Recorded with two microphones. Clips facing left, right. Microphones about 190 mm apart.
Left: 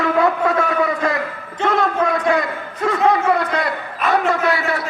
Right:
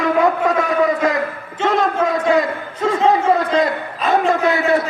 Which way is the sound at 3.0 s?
25° right (ahead or behind).